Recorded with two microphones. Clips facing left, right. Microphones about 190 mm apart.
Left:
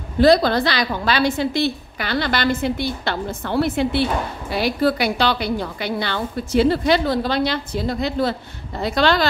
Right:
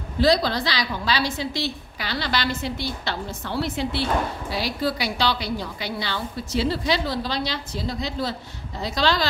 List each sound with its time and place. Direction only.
0.2 s a woman's voice: 55° left (ahead or behind)